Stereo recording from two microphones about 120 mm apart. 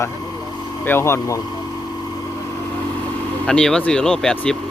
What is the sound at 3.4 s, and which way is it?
Speech, 5° left (ahead or behind).